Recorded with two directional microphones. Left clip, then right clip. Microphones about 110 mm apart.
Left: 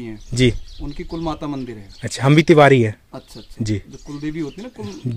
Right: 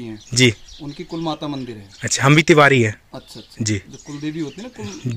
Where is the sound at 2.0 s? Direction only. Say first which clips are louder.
Right 2 dB; 15° left (ahead or behind).